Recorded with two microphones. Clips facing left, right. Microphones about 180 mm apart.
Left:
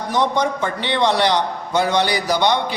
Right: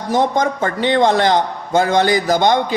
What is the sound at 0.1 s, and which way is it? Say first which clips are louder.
A man's voice: right 3 dB; 45° right (ahead or behind).